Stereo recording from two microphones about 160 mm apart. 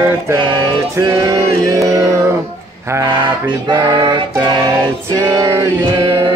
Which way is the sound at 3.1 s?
30° right (ahead or behind).